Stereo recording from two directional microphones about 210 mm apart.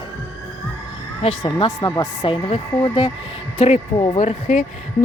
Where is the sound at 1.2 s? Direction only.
25° left (ahead or behind).